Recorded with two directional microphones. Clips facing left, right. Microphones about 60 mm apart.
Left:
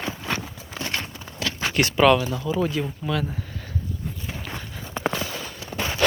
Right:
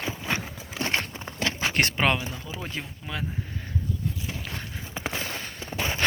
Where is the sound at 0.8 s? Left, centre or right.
Right.